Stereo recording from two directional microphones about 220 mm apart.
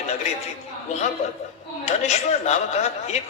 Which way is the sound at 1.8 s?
30° left (ahead or behind).